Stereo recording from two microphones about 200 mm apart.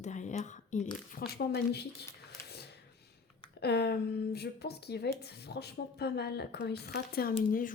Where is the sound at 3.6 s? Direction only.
55° left (ahead or behind).